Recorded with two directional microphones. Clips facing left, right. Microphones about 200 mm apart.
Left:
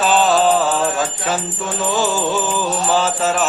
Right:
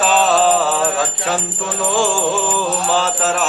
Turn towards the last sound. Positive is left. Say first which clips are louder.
# left 1 dB
turn(degrees=0)  # may be behind; listen again after turning